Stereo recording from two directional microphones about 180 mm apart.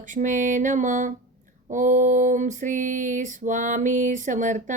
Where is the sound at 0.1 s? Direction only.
45° right (ahead or behind).